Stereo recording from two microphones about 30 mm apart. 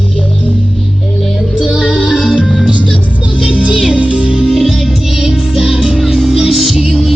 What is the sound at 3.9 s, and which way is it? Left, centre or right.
Music, right.